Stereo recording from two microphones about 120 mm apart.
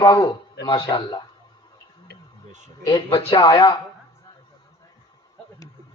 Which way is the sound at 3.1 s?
50° left (ahead or behind).